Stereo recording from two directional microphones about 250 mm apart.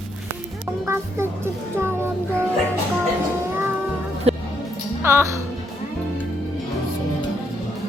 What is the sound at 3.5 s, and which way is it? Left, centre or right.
Music, centre.